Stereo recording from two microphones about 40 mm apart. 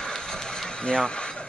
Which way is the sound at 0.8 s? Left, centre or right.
Left.